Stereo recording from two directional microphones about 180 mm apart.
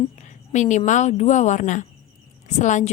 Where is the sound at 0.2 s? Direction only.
40° left (ahead or behind).